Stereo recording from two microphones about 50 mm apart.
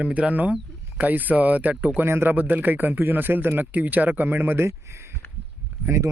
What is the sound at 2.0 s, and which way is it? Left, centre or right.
Speech, right.